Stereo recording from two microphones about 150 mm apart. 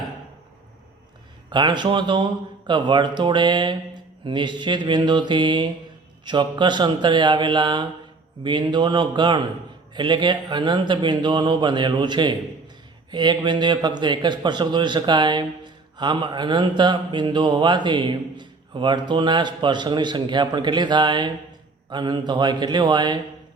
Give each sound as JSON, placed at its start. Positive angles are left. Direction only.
{"t": 1.5, "sound": "a man's voice", "side_deg": -30}